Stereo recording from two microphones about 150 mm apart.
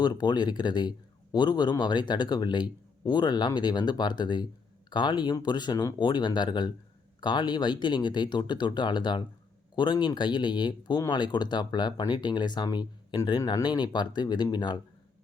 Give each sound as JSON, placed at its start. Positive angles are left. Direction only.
{"t": 0.0, "sound": "a man's voice", "side_deg": 30}